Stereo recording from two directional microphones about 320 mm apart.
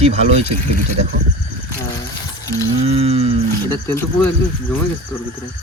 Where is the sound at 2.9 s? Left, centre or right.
Centre.